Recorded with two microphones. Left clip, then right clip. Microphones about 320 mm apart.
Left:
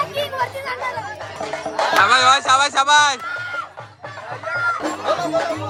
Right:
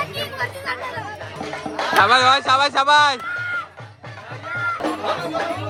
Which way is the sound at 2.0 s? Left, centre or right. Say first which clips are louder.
Even; centre.